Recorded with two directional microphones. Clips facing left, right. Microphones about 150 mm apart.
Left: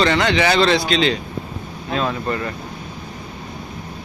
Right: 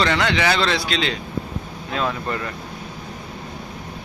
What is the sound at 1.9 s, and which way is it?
Speech, 20° left (ahead or behind).